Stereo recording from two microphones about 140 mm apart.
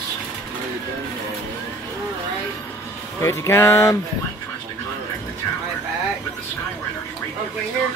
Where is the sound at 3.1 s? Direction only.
20° left (ahead or behind).